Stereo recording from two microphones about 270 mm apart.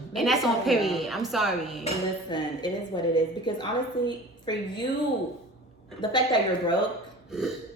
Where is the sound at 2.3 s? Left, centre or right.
Centre.